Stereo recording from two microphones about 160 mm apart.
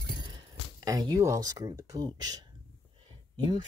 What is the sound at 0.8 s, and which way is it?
Speech, 20° right (ahead or behind).